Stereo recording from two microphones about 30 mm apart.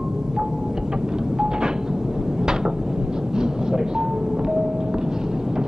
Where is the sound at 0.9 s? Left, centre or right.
Right.